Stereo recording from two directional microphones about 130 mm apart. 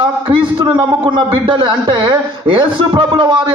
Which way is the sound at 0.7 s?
25° right (ahead or behind).